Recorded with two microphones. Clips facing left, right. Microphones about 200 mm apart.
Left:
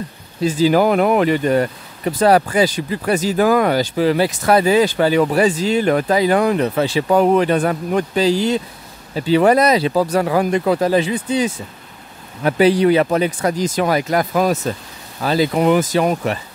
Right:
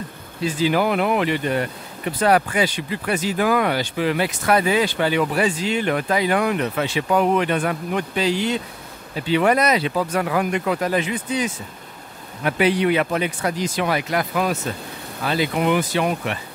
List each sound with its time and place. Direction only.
0.4 s speech: 40° left (ahead or behind)